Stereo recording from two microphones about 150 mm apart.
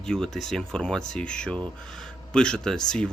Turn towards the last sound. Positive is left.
turn(degrees=5)  # may be behind; listen again after turning